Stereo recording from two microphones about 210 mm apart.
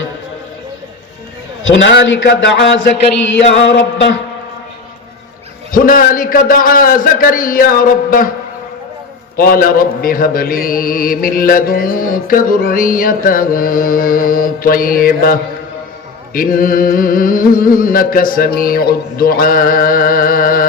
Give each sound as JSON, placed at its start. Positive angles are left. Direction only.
{"t": 1.6, "sound": "a man's voice", "side_deg": 60}
{"t": 5.7, "sound": "a man's voice", "side_deg": 40}
{"t": 9.4, "sound": "mantra", "side_deg": 45}